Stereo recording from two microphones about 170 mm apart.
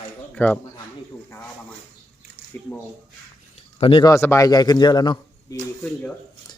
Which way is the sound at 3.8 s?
30° left (ahead or behind).